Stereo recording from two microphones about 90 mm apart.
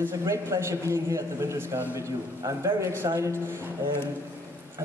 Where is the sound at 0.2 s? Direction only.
35° right (ahead or behind).